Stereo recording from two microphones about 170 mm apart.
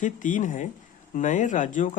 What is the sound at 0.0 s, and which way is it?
Speech, 50° left (ahead or behind).